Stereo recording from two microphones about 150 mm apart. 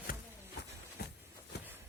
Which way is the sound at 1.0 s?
90° left.